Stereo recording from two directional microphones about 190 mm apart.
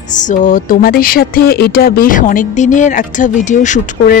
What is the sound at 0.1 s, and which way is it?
Speech, 40° left (ahead or behind).